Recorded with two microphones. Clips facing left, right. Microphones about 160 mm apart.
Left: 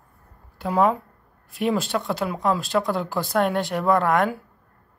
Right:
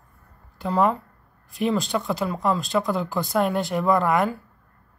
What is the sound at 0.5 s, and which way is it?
Speech, 5° left (ahead or behind).